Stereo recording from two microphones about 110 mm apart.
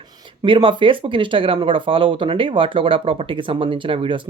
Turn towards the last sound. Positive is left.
turn(degrees=-50)  # may be behind; listen again after turning